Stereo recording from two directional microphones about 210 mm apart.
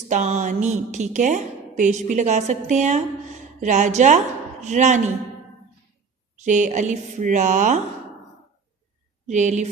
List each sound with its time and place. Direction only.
0.1 s a woman's voice: 35° right (ahead or behind)
6.4 s a woman's voice: 35° right (ahead or behind)
9.2 s a woman's voice: 35° right (ahead or behind)